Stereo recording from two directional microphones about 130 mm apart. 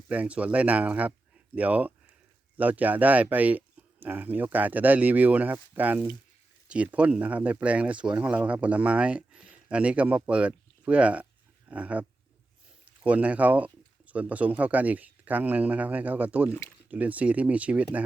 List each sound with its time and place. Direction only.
0.1 s speech: 10° right (ahead or behind)
16.5 s speech: 20° left (ahead or behind)
16.9 s speech: 10° right (ahead or behind)